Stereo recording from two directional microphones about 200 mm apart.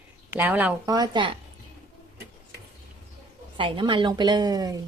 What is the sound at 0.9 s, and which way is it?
Speech, 20° right (ahead or behind).